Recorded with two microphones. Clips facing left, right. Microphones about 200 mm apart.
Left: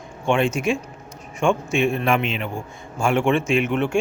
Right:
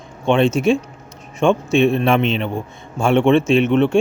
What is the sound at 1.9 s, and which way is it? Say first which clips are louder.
Speech: right 5 dB; 25° right (ahead or behind).